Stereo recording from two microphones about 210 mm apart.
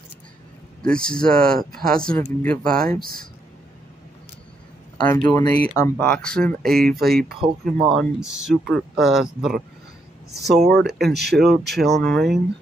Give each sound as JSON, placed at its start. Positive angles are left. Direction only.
{"t": 0.8, "sound": "speech", "side_deg": 5}
{"t": 5.0, "sound": "speech", "side_deg": 5}
{"t": 5.3, "sound": "speech", "side_deg": 15}
{"t": 5.9, "sound": "speech", "side_deg": 5}